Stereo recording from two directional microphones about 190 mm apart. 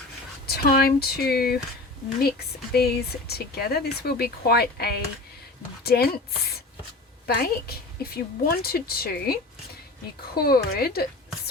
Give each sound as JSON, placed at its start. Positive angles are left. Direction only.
{"t": 0.4, "sound": "speech", "side_deg": 55}
{"t": 7.3, "sound": "a woman's voice", "side_deg": 55}
{"t": 10.3, "sound": "a woman's voice", "side_deg": 55}